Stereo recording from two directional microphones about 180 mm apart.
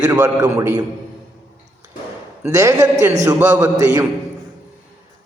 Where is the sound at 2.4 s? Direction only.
20° right (ahead or behind).